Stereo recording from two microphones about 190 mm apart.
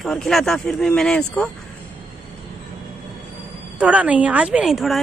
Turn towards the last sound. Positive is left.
turn(degrees=0)  # may be behind; listen again after turning